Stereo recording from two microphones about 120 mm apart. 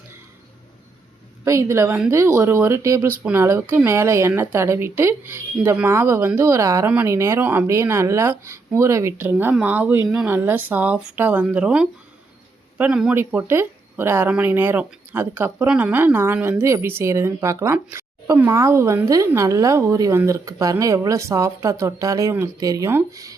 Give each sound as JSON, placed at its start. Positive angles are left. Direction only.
{"t": 1.5, "sound": "a woman's voice", "side_deg": -25}
{"t": 13.1, "sound": "a woman's voice", "side_deg": -20}